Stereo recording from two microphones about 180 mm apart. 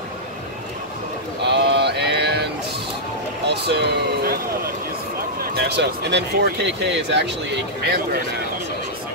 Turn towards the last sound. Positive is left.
turn(degrees=-75)  # may be behind; listen again after turning